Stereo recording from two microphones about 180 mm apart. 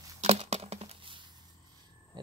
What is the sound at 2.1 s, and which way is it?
Hum, 25° right (ahead or behind).